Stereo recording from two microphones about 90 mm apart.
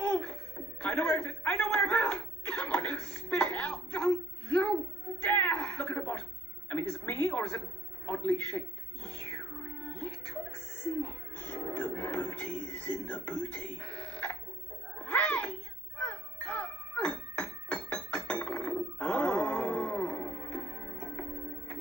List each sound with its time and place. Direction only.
0.1 s a sound: 10° left (ahead or behind)
5.2 s music: 15° left (ahead or behind)
8.3 s a man's voice: 20° left (ahead or behind)
9.8 s music: 15° left (ahead or behind)
15.0 s a sound: 15° left (ahead or behind)
16.0 s music: 15° left (ahead or behind)